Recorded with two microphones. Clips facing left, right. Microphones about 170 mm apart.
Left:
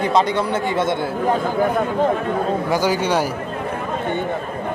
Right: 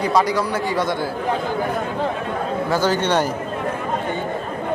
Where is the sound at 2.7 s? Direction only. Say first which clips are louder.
Right 2 dB; 10° left (ahead or behind).